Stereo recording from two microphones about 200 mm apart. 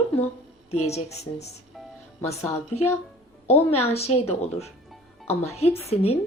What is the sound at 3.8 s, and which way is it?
Speech, 30° left (ahead or behind).